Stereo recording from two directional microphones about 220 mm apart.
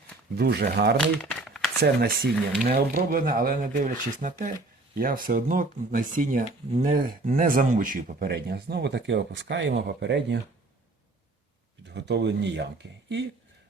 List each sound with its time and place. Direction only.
0.3 s speech: 45° right (ahead or behind)
1.2 s a sound: centre (ahead or behind)
1.8 s speech: 45° right (ahead or behind)
11.9 s speech: 50° right (ahead or behind)